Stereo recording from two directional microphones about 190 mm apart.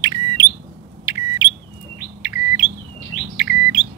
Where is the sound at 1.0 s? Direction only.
10° right (ahead or behind).